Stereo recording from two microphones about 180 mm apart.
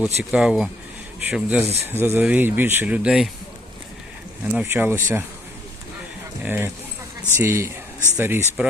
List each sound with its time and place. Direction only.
0.0 s speech: 5° right (ahead or behind)
4.4 s speech: 10° right (ahead or behind)
6.4 s speech: 10° right (ahead or behind)